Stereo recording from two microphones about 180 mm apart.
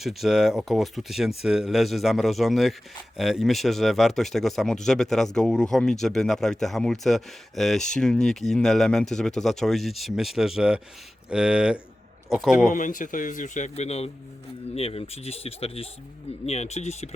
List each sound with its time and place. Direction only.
0.0 s speech: centre (ahead or behind)
12.7 s a man's voice: 45° left (ahead or behind)